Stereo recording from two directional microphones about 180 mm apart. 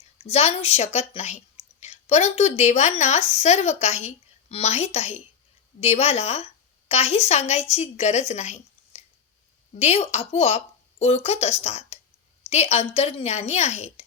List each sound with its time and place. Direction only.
0.2 s a woman's voice: 35° left (ahead or behind)